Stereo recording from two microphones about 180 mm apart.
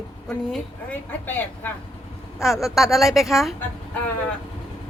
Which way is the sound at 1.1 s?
10° left (ahead or behind).